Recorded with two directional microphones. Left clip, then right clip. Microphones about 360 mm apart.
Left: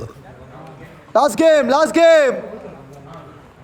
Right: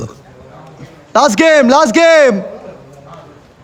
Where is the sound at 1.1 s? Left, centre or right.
Right.